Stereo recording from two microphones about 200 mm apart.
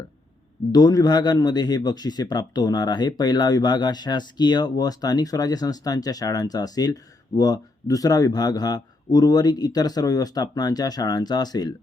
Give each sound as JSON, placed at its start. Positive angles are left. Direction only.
{"t": 0.7, "sound": "a man's voice", "side_deg": 20}